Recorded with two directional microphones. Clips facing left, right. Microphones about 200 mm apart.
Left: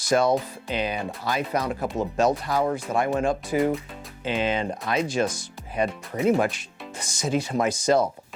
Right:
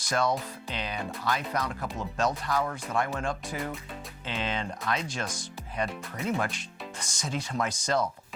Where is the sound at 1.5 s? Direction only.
20° left (ahead or behind).